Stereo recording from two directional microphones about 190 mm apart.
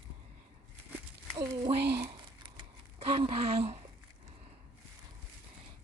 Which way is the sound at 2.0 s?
25° right (ahead or behind).